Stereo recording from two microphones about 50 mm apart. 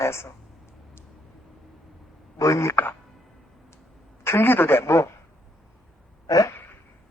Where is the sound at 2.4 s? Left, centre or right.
Left.